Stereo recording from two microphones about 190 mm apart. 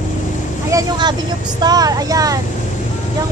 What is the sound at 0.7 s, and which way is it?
Vehicle, 20° right (ahead or behind).